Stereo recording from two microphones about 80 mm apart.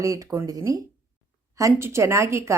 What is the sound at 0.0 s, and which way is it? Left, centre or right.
A woman's voice, right.